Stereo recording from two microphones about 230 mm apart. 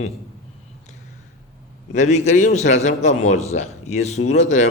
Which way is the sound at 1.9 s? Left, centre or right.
Left.